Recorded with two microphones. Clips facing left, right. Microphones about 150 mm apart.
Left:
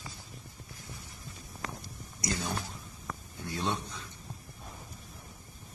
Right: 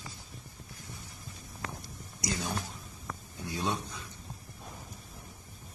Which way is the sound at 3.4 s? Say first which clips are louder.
Even; 15° right (ahead or behind).